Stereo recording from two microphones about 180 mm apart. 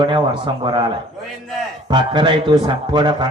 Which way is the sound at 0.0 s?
25° right (ahead or behind).